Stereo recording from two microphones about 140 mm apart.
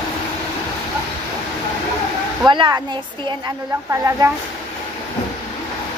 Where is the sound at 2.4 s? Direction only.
30° right (ahead or behind).